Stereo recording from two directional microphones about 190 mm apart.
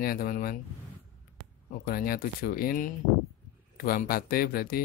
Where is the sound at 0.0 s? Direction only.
50° left (ahead or behind).